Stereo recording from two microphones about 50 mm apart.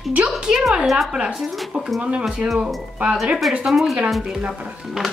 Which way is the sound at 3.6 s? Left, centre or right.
Centre.